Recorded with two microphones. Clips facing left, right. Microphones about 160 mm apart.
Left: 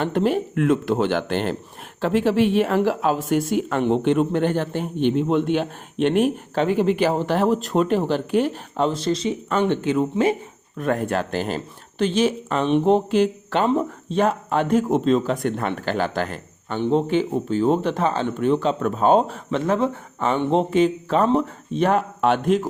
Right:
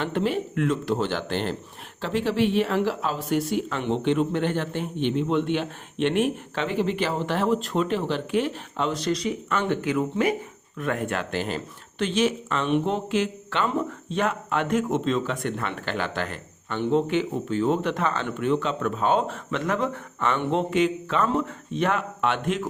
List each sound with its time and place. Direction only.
0.0 s speech: 45° left (ahead or behind)